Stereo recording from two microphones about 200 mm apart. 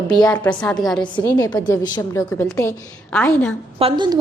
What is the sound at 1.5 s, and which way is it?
A woman's voice, 20° left (ahead or behind).